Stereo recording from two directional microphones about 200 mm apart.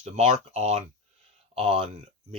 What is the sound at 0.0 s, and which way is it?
Speech, 35° right (ahead or behind).